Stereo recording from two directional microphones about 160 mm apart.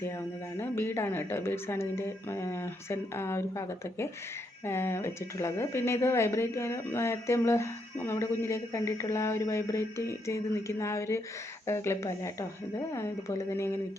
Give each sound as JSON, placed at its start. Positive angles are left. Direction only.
{"t": 0.6, "sound": "speech", "side_deg": 15}